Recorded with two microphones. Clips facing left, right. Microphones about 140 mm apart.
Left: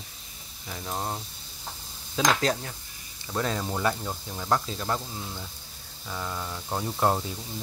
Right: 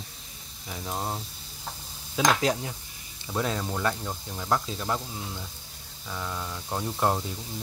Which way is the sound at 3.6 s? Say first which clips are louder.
Left 1 dB; 10° left (ahead or behind).